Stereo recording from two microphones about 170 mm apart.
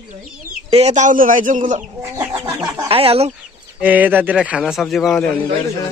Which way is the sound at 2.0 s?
15° right (ahead or behind).